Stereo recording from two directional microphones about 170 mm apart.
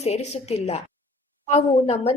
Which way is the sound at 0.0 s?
40° left (ahead or behind).